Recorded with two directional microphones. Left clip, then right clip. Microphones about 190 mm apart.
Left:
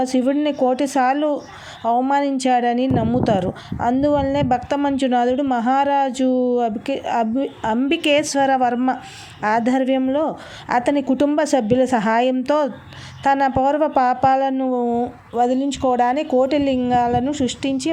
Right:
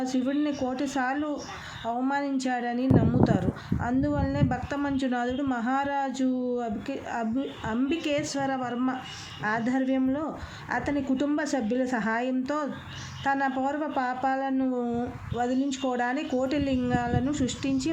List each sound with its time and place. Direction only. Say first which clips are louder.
0.0 s speech: left 9 dB; 35° left (ahead or behind)